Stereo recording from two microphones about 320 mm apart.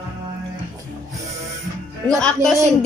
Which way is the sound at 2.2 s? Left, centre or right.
Centre.